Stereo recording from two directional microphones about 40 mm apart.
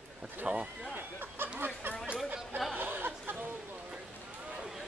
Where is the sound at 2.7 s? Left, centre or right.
Right.